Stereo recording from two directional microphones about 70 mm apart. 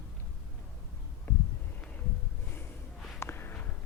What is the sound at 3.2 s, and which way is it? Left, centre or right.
Walk, left.